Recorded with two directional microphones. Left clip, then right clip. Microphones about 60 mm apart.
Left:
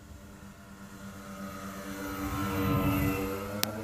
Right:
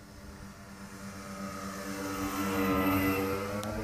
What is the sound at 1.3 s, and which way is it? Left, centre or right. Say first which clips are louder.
Music: right 2 dB; right.